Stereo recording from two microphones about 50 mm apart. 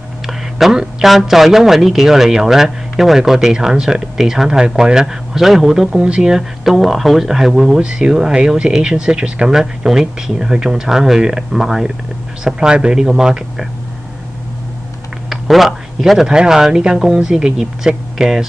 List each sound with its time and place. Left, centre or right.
0.3 s a sound: centre
1.0 s speech: centre
7.8 s speech: centre
12.5 s speech: centre
15.2 s speech: centre